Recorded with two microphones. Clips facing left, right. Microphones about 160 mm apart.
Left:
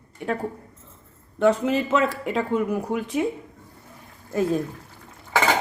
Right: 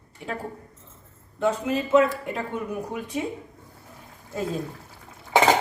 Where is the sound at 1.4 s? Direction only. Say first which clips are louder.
Left 4 dB; 80° left.